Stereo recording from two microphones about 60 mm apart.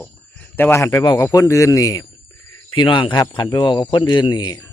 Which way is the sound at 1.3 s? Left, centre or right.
Left.